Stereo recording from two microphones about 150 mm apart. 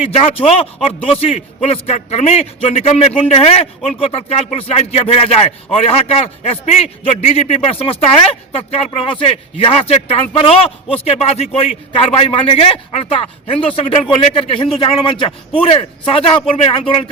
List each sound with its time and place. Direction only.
0.0 s a man's voice: 40° left (ahead or behind)